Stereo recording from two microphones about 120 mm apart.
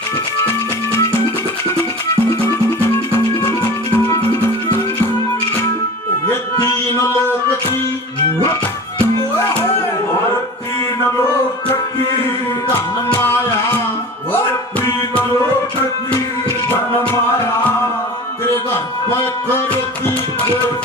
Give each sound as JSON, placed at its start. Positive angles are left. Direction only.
{"t": 3.4, "sound": "music", "side_deg": 20}
{"t": 6.6, "sound": "music", "side_deg": 25}
{"t": 16.6, "sound": "music", "side_deg": 15}
{"t": 19.5, "sound": "music", "side_deg": 20}